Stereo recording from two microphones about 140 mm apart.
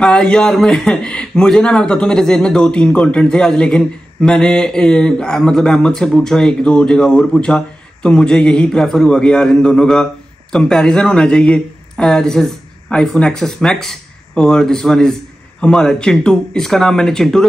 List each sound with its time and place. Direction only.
0.0 s a man's voice: 5° left (ahead or behind)